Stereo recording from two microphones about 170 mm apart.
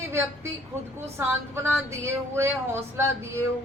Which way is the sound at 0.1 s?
15° right (ahead or behind).